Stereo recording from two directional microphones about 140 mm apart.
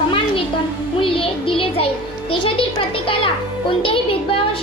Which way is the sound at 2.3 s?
40° left (ahead or behind).